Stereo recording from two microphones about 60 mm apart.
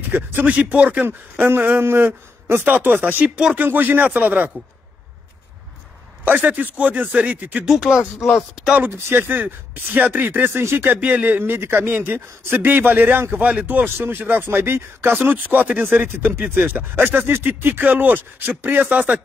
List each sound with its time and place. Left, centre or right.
0.1 s speech: right
0.5 s speech: right
1.4 s speech: right
6.2 s speech: right
7.6 s speech: centre
8.9 s speech: right
10.9 s speech: right
13.4 s speech: right